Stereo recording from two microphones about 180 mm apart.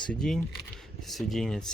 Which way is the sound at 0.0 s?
5° left (ahead or behind).